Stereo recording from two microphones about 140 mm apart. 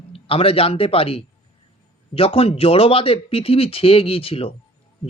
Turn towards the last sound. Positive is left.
turn(degrees=45)  # may be behind; listen again after turning